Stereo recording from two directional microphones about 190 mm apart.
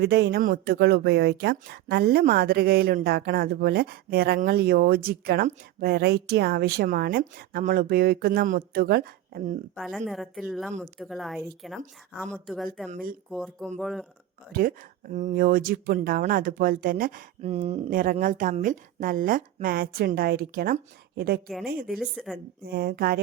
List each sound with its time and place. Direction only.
0.0 s a woman's voice: 60° right (ahead or behind)
9.7 s a woman's voice: centre (ahead or behind)
12.9 s speech: 50° right (ahead or behind)
13.3 s a woman's voice: centre (ahead or behind)
15.1 s speech: 40° right (ahead or behind)
21.4 s a woman's voice: centre (ahead or behind)
21.7 s speech: 50° right (ahead or behind)
21.9 s a woman's voice: centre (ahead or behind)
22.6 s speech: 55° right (ahead or behind)